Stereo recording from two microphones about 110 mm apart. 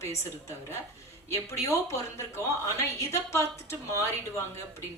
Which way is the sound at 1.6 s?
25° left (ahead or behind).